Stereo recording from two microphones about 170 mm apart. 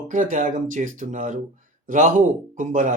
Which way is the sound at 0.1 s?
50° right (ahead or behind).